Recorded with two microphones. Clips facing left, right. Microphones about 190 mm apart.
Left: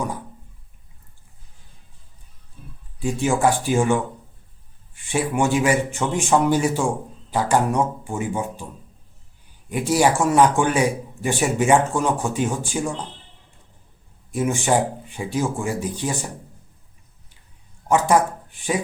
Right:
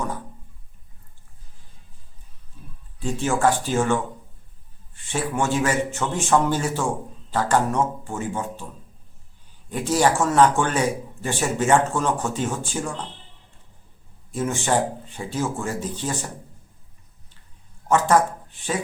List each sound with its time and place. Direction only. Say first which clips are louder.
3.0 s a man's voice: left 2 dB; 10° left (ahead or behind)
9.6 s a man's voice: left 2 dB; 10° left (ahead or behind)
14.3 s a man's voice: left 2 dB; 15° left (ahead or behind)
17.8 s a sound: left 1 dB; 10° left (ahead or behind)